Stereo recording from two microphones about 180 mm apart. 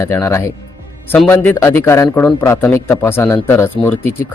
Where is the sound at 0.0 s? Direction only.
15° left (ahead or behind).